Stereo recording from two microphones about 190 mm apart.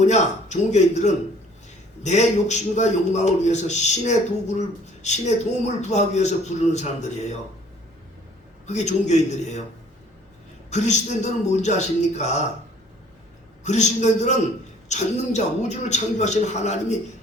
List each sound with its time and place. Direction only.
0.0 s a man's voice: 35° left (ahead or behind)
8.6 s a man's voice: 40° left (ahead or behind)
10.7 s a man's voice: 40° left (ahead or behind)
13.7 s a man's voice: 40° left (ahead or behind)